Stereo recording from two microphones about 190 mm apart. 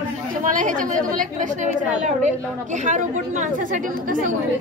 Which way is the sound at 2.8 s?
40° right (ahead or behind).